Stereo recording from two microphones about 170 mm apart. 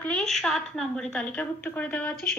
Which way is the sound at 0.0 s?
5° left (ahead or behind).